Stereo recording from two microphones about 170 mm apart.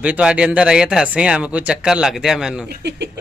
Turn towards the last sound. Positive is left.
turn(degrees=-80)